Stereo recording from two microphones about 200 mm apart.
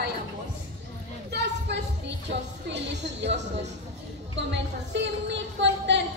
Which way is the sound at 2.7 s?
60° right (ahead or behind).